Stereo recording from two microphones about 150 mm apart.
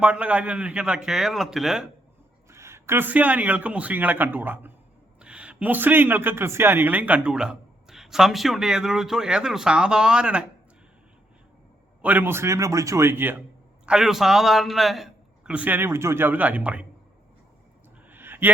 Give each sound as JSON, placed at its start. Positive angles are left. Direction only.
{"t": 0.0, "sound": "a man's voice", "side_deg": -10}
{"t": 2.5, "sound": "a man's voice", "side_deg": -20}
{"t": 12.0, "sound": "a man's voice", "side_deg": -15}
{"t": 13.8, "sound": "a man's voice", "side_deg": -5}
{"t": 18.1, "sound": "a sound", "side_deg": -15}